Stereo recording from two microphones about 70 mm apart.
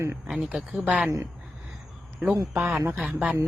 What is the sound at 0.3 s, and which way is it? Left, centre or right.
Speech, centre.